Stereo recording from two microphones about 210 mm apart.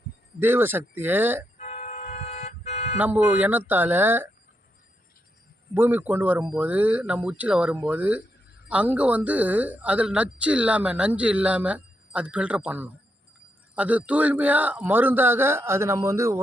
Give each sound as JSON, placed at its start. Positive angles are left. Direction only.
{"t": 0.3, "sound": "a man's voice", "side_deg": -10}
{"t": 1.5, "sound": "toot", "side_deg": 30}
{"t": 3.0, "sound": "a man's voice", "side_deg": -10}
{"t": 5.7, "sound": "a man's voice", "side_deg": -10}